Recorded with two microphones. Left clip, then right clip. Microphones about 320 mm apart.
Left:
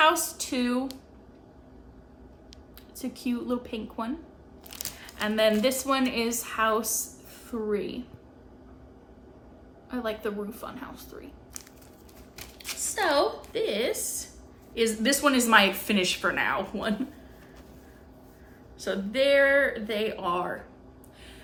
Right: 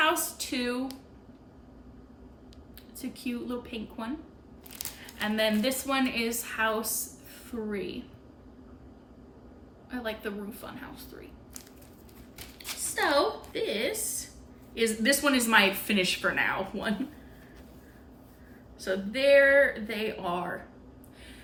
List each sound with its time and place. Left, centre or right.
0.0 s speech: centre
3.0 s a woman's voice: centre
9.9 s a woman's voice: centre
12.4 s a sound: centre
13.5 s a woman's voice: centre
18.8 s a woman's voice: centre